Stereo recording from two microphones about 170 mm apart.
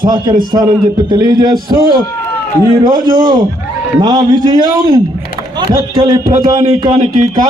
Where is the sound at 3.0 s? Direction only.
25° right (ahead or behind).